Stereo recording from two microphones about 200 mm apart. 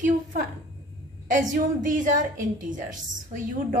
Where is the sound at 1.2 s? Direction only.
40° right (ahead or behind).